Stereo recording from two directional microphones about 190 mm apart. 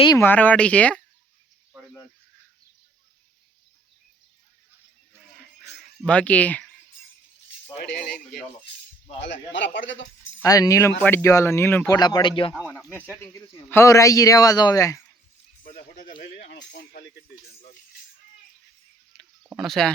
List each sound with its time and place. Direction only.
0.2 s a man's voice: 10° left (ahead or behind)
6.1 s a man's voice: 5° left (ahead or behind)
7.8 s speech: 55° left (ahead or behind)
9.2 s speech: 70° left (ahead or behind)
10.4 s a man's voice: 20° left (ahead or behind)
11.9 s speech: 20° left (ahead or behind)
13.1 s a man's voice: 10° left (ahead or behind)
16.9 s speech: 60° left (ahead or behind)
19.1 s a sound: centre (ahead or behind)
19.5 s speech: centre (ahead or behind)